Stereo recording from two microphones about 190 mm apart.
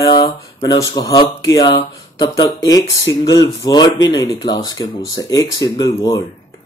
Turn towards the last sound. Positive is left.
turn(degrees=20)  # may be behind; listen again after turning